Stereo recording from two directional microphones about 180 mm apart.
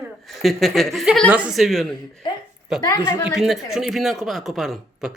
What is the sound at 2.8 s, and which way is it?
Speech, 20° left (ahead or behind).